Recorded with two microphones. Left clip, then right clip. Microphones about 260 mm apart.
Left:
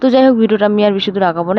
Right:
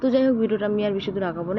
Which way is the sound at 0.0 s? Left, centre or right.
Left.